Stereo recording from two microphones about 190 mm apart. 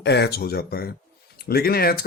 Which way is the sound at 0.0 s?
60° left (ahead or behind).